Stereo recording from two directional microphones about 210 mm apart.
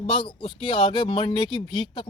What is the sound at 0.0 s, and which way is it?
A man's voice, 25° left (ahead or behind).